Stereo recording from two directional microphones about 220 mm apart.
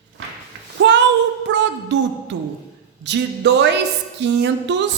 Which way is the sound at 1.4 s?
55° right (ahead or behind).